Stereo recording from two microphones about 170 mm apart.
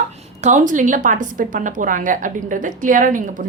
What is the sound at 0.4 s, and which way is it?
A woman's voice, 50° right (ahead or behind).